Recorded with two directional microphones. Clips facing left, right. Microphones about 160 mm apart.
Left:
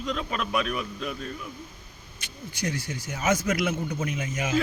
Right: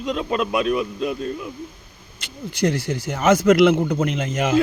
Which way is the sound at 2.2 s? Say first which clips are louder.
Right 11 dB; 75° right (ahead or behind).